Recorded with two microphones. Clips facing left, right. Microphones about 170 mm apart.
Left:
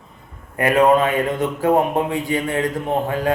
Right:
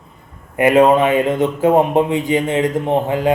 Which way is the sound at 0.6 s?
20° right (ahead or behind).